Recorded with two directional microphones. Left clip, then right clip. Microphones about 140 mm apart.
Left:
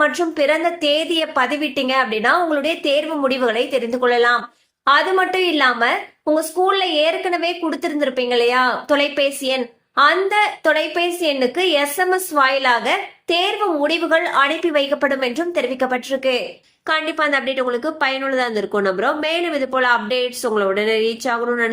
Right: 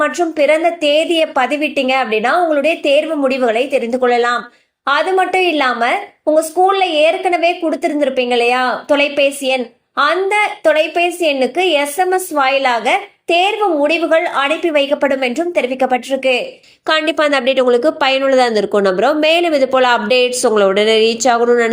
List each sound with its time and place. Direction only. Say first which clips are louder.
0.0 s a woman's voice: right 3 dB; 15° right (ahead or behind)
16.8 s a woman's voice: right 5 dB; 50° right (ahead or behind)